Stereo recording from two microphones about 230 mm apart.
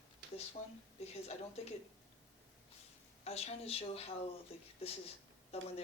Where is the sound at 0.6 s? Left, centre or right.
Left.